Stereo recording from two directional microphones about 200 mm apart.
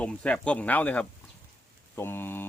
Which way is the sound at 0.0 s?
5° left (ahead or behind).